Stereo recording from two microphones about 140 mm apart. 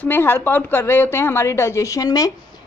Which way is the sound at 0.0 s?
15° left (ahead or behind).